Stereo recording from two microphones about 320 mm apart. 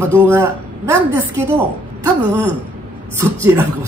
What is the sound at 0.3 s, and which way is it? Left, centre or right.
A woman's voice, centre.